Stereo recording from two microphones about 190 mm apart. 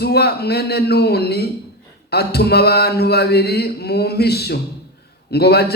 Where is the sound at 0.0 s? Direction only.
60° left (ahead or behind).